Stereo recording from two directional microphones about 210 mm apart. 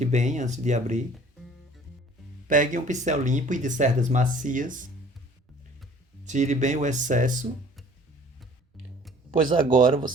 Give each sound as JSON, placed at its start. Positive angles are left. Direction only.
{"t": 0.0, "sound": "speech", "side_deg": -35}
{"t": 2.5, "sound": "speech", "side_deg": -40}
{"t": 6.2, "sound": "speech", "side_deg": -35}
{"t": 9.5, "sound": "speech", "side_deg": -20}